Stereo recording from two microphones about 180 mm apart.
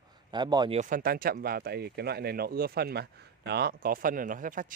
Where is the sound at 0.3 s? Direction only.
25° right (ahead or behind).